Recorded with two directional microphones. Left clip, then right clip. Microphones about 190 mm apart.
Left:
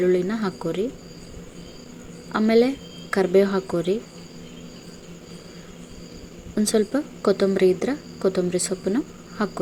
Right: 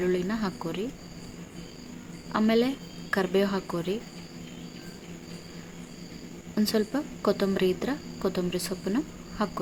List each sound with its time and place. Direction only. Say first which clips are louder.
0.0 s a woman's voice: left 7 dB; 15° left (ahead or behind)
2.3 s a woman's voice: left 6 dB; 15° left (ahead or behind)
6.5 s a woman's voice: left 6 dB; 15° left (ahead or behind)